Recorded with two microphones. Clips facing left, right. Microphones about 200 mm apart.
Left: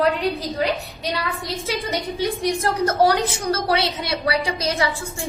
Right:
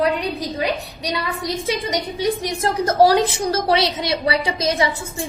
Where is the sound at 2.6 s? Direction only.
30° right (ahead or behind).